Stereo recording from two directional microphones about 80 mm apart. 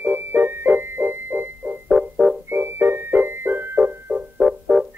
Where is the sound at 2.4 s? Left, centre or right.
Right.